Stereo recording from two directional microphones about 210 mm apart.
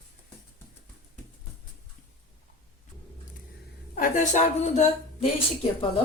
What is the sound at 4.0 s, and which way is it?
Speech, 35° left (ahead or behind).